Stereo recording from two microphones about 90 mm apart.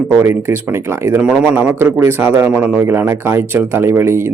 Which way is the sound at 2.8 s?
30° right (ahead or behind).